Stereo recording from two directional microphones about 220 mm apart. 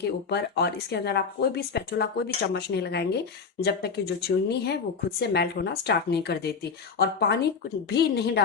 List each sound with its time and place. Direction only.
0.0 s speech: 50° left (ahead or behind)